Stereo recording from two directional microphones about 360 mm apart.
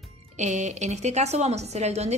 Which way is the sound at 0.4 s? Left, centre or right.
Centre.